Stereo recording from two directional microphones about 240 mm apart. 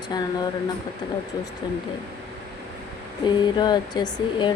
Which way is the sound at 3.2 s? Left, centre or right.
Centre.